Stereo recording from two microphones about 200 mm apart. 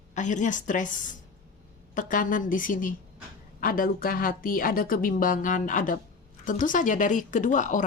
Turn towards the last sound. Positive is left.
turn(degrees=40)  # may be behind; listen again after turning